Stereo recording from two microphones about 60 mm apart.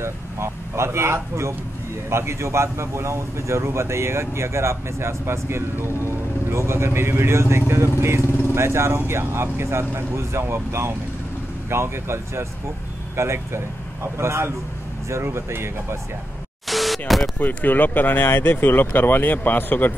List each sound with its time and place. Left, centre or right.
0.0 s speech: right
16.6 s a sound: centre
17.4 s speech: left